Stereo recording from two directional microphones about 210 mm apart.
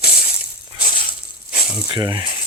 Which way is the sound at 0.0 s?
45° left (ahead or behind).